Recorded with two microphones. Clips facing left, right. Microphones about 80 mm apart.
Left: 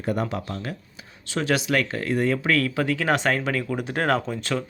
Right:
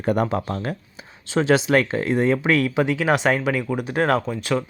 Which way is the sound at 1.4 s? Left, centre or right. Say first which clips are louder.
Right 5 dB; right.